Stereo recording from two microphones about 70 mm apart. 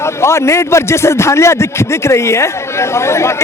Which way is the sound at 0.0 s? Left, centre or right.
Left.